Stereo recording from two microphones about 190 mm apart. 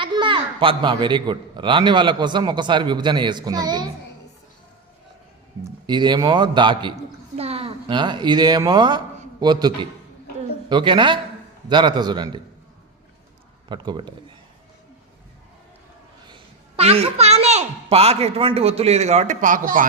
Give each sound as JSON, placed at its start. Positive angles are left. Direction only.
{"t": 0.0, "sound": "a man's voice", "side_deg": -25}
{"t": 5.8, "sound": "a man's voice", "side_deg": -25}
{"t": 13.7, "sound": "a man's voice", "side_deg": -25}
{"t": 16.3, "sound": "a woman's voice", "side_deg": -30}